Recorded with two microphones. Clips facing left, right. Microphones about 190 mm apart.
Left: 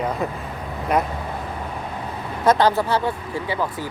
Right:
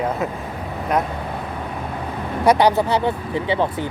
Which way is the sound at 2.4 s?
15° right (ahead or behind).